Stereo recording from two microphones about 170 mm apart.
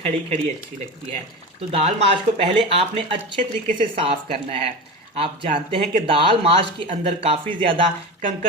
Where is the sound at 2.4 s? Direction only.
35° right (ahead or behind).